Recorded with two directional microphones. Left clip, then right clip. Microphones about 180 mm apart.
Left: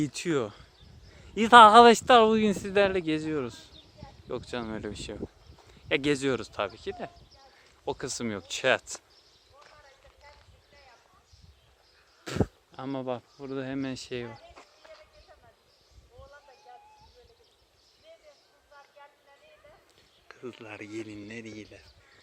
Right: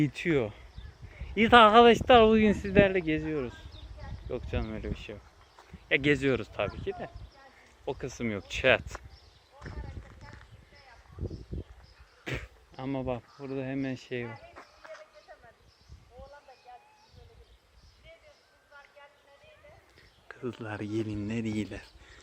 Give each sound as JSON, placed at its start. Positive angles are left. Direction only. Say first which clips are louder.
{"t": 0.0, "sound": "speech", "louder": "right 1 dB", "side_deg": 30}
{"t": 8.2, "sound": "speech", "louder": "right 2 dB", "side_deg": 25}
{"t": 12.2, "sound": "speech", "louder": "left 6 dB", "side_deg": 25}
{"t": 20.6, "sound": "speech", "louder": "right 5 dB", "side_deg": -15}
{"t": 21.6, "sound": "speech", "louder": "right 9 dB", "side_deg": -45}